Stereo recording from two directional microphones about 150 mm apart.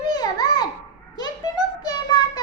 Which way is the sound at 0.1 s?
25° left (ahead or behind).